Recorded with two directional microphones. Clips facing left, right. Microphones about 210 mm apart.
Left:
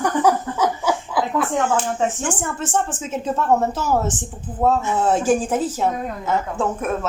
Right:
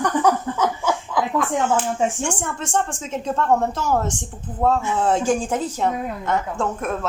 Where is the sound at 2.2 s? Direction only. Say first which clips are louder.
Left 1 dB; 5° left (ahead or behind).